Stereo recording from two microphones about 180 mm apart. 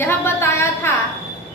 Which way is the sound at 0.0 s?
15° left (ahead or behind).